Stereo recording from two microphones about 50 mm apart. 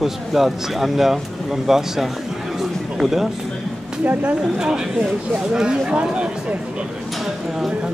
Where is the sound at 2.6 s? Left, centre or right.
Centre.